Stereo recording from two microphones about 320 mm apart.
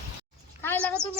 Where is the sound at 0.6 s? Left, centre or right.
Centre.